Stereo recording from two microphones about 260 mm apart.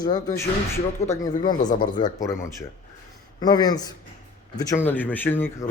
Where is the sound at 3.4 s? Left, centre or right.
Centre.